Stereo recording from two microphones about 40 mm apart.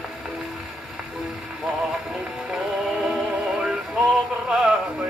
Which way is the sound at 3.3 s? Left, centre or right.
Right.